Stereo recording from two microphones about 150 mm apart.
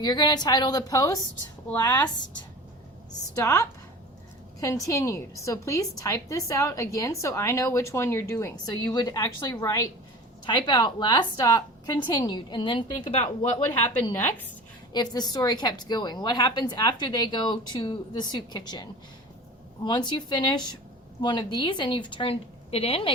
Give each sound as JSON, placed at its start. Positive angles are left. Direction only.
{"t": 0.0, "sound": "a woman's voice", "side_deg": 25}
{"t": 3.3, "sound": "a woman's voice", "side_deg": 20}
{"t": 13.7, "sound": "a woman's voice", "side_deg": 15}
{"t": 15.1, "sound": "a woman's voice", "side_deg": 25}